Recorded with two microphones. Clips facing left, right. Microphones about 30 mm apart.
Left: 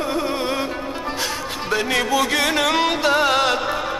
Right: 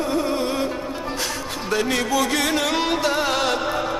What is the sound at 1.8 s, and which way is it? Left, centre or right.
Music, left.